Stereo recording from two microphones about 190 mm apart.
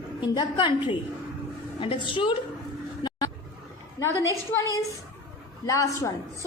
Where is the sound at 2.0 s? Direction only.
25° left (ahead or behind).